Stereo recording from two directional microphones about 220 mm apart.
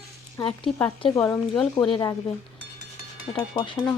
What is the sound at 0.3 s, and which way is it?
A woman's voice, 25° left (ahead or behind).